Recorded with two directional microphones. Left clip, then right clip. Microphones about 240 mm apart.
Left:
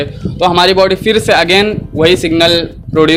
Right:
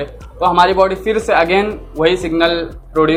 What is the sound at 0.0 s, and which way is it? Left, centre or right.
A man's voice, left.